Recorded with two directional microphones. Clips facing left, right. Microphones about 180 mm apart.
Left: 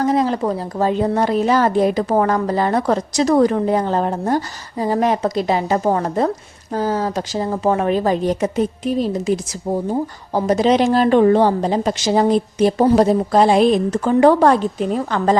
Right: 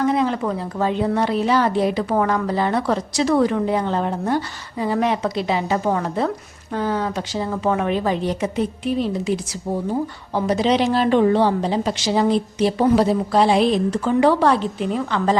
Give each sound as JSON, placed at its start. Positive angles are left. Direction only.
{"t": 0.0, "sound": "a woman's voice", "side_deg": 40}